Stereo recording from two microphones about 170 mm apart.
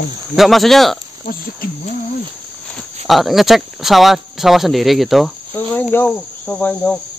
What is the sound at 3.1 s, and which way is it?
Speech, centre (ahead or behind).